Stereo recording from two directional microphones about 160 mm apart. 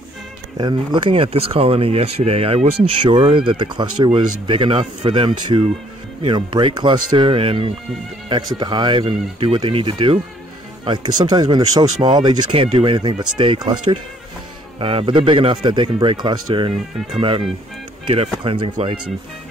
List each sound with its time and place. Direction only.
0.6 s speech: 30° right (ahead or behind)